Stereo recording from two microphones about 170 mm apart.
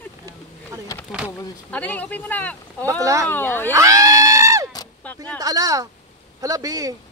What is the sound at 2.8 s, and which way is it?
Speech, 20° right (ahead or behind).